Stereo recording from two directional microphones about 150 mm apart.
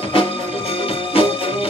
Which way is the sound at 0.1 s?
40° left (ahead or behind).